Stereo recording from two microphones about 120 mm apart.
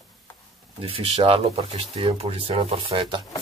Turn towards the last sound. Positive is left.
turn(degrees=-45)  # may be behind; listen again after turning